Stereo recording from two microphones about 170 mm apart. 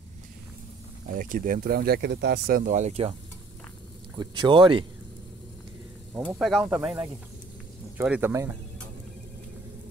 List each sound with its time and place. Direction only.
1.0 s speech: 55° right (ahead or behind)
4.2 s speech: 30° right (ahead or behind)
6.1 s speech: 5° right (ahead or behind)
8.0 s speech: 10° right (ahead or behind)